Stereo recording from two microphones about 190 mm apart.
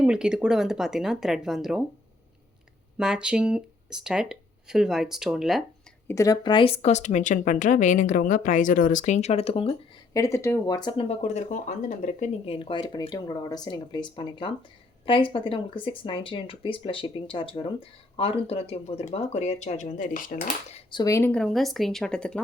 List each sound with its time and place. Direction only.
0.0 s speech: 5° right (ahead or behind)
3.0 s speech: 5° right (ahead or behind)
6.1 s speech: 15° left (ahead or behind)
10.2 s speech: 15° left (ahead or behind)
11.2 s speech: 35° left (ahead or behind)
20.7 s speech: 20° left (ahead or behind); by 22.4 s 5° left (ahead or behind)